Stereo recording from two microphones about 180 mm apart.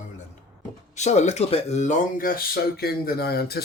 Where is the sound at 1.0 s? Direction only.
40° left (ahead or behind).